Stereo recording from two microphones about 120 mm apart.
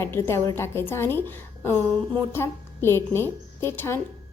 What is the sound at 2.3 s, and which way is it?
A woman's voice, 20° left (ahead or behind).